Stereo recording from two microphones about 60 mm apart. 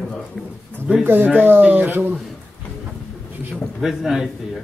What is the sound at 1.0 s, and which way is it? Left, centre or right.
Speech, right.